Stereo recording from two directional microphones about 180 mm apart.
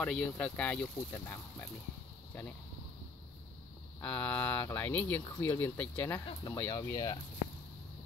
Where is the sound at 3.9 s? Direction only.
10° left (ahead or behind).